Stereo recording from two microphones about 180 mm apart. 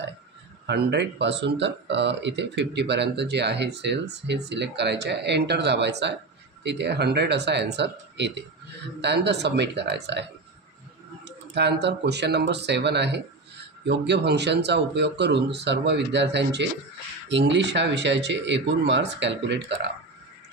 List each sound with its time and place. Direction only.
0.7 s speech: 70° right (ahead or behind)
11.2 s speech: 70° right (ahead or behind)